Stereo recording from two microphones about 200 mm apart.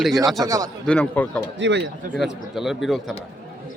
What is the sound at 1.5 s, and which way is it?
Speech, 60° right (ahead or behind).